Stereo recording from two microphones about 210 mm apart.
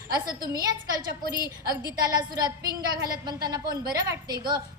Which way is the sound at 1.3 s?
20° left (ahead or behind).